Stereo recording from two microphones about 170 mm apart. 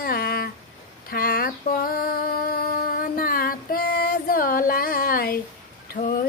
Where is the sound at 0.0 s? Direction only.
65° left (ahead or behind).